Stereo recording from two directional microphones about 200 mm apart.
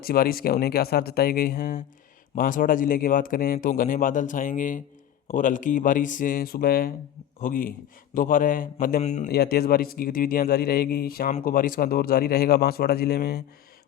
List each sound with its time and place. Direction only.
0.0 s speech: 50° left (ahead or behind)
9.3 s speech: 50° left (ahead or behind)